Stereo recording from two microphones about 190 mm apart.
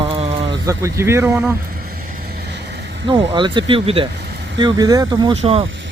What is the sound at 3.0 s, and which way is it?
Speech, 25° right (ahead or behind).